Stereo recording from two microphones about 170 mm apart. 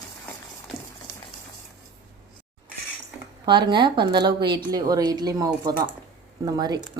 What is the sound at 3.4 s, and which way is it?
A woman's voice, 25° right (ahead or behind).